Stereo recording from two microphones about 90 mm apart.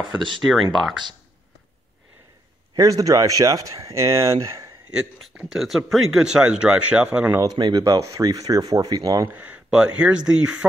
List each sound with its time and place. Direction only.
0.4 s speech: centre (ahead or behind)
2.7 s speech: 40° right (ahead or behind)
4.9 s speech: 10° right (ahead or behind)
7.4 s speech: 55° right (ahead or behind)
7.8 s speech: 40° right (ahead or behind)
9.3 s speech: 20° right (ahead or behind)